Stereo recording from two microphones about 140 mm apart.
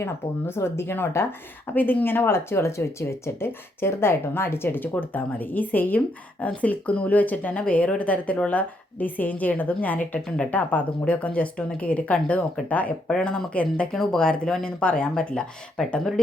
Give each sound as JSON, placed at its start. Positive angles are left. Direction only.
{"t": 0.0, "sound": "speech", "side_deg": 20}